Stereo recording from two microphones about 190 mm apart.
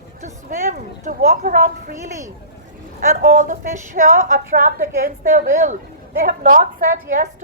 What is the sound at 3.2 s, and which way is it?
A woman's voice, 45° right (ahead or behind).